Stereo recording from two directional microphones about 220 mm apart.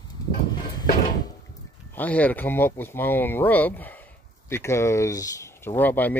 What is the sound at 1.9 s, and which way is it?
Speech, 5° left (ahead or behind).